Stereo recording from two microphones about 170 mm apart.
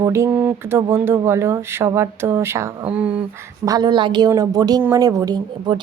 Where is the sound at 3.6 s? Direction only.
25° right (ahead or behind).